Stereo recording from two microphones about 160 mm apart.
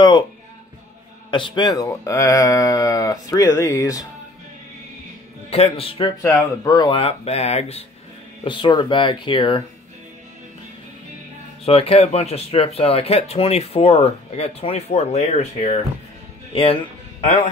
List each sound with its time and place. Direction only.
1.3 s speech: 30° left (ahead or behind)
5.5 s speech: 40° left (ahead or behind)
6.2 s speech: 20° left (ahead or behind); by 7.8 s 40° left (ahead or behind)
8.5 s speech: 30° left (ahead or behind)
11.6 s speech: 35° left (ahead or behind)
17.2 s a man's voice: 35° left (ahead or behind)